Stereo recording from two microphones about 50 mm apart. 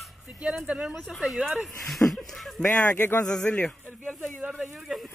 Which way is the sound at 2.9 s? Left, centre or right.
Left.